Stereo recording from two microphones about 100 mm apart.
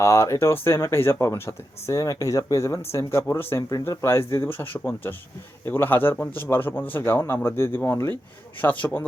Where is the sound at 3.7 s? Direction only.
35° left (ahead or behind).